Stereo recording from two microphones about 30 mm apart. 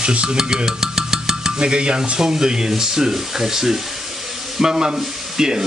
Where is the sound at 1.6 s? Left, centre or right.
Right.